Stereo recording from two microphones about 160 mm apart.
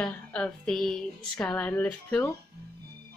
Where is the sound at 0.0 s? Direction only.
5° left (ahead or behind).